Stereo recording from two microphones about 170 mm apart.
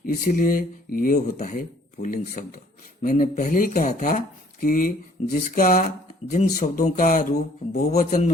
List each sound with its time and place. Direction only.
0.0 s speech: 55° left (ahead or behind)